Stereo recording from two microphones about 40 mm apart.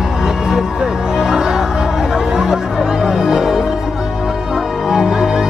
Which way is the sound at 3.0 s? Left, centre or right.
Centre.